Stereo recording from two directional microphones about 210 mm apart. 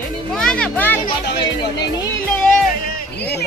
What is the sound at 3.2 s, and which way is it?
Speech, 50° left (ahead or behind).